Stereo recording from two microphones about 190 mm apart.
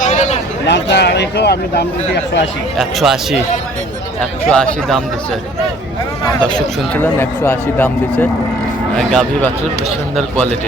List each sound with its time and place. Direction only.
0.0 s a sound: 40° left (ahead or behind)
0.7 s speech: 65° left (ahead or behind)
2.7 s speech: centre (ahead or behind)
4.4 s speech: 5° left (ahead or behind)
6.5 s speech: 10° left (ahead or behind)